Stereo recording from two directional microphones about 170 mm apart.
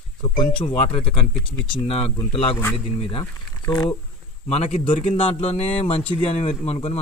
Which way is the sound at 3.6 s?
20° left (ahead or behind).